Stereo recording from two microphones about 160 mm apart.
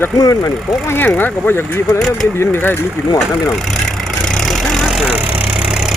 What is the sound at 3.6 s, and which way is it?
Vehicle, centre (ahead or behind).